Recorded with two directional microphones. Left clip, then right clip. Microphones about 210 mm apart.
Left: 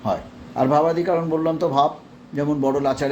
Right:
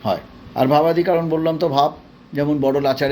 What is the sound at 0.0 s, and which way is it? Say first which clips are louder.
A man's voice: right 2 dB; 25° right (ahead or behind).